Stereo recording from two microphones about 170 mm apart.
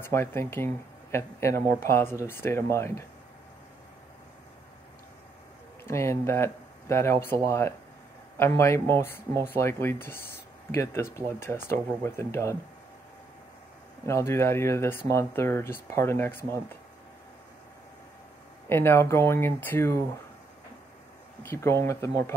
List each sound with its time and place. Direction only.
0.0 s speech: 15° left (ahead or behind)
5.9 s speech: 15° left (ahead or behind)
11.1 s speech: 15° left (ahead or behind)
14.0 s speech: 15° left (ahead or behind)
18.7 s speech: 15° left (ahead or behind)
21.4 s speech: 15° left (ahead or behind)